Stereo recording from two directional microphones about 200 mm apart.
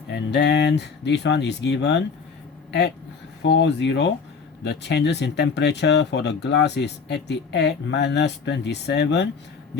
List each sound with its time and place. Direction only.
0.1 s speech: 60° left (ahead or behind)
3.4 s speech: 60° left (ahead or behind)